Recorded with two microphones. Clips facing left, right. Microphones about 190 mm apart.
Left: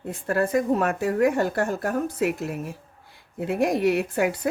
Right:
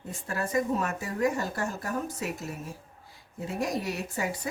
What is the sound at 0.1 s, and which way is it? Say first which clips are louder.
A woman's voice: left 7 dB; 60° left (ahead or behind).